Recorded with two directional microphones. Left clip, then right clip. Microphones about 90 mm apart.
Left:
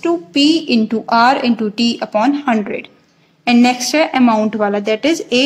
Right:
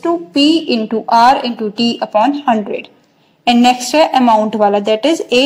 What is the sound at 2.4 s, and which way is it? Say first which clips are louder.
A woman's voice: right 3 dB; 15° right (ahead or behind).